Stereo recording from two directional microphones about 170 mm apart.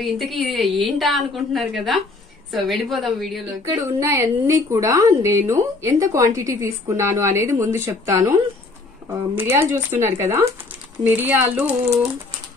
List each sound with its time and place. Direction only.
0.0 s a woman's voice: centre (ahead or behind)
3.7 s a woman's voice: 20° right (ahead or behind)